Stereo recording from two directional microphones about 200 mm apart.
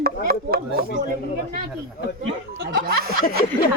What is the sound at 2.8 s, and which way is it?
Speech, 50° right (ahead or behind).